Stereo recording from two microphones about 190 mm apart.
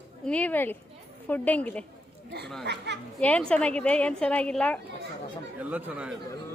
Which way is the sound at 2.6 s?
65° right (ahead or behind).